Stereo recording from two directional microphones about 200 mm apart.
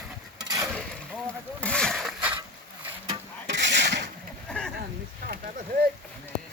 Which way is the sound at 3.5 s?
60° right (ahead or behind).